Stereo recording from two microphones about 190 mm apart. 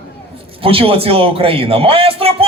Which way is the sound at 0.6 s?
30° right (ahead or behind).